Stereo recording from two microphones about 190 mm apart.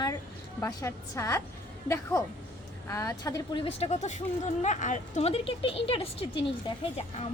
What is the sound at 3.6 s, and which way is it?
Speech, 35° left (ahead or behind).